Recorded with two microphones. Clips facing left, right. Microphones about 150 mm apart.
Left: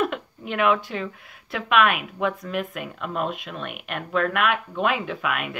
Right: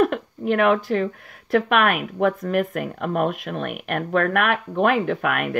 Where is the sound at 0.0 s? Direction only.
45° right (ahead or behind).